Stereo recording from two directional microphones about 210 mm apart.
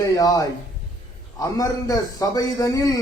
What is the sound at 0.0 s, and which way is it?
A man's voice, 15° left (ahead or behind).